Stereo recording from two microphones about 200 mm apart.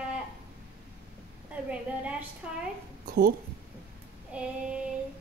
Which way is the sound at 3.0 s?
50° right (ahead or behind).